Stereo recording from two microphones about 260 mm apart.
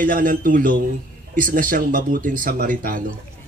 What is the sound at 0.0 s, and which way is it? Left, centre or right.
A man's voice, right.